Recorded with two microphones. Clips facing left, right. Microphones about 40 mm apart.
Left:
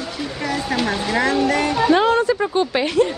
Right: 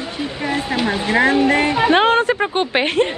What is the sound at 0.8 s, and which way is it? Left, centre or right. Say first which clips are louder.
Speech: right 2 dB; centre.